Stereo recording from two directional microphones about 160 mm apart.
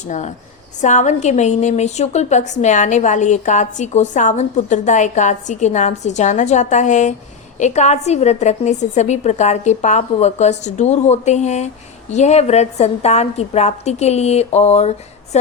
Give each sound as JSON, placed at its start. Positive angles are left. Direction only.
{"t": 0.1, "sound": "a woman's voice", "side_deg": 45}